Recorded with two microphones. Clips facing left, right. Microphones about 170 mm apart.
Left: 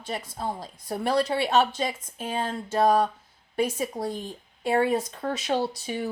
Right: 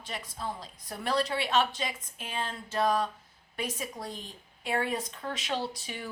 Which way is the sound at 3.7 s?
30° left (ahead or behind).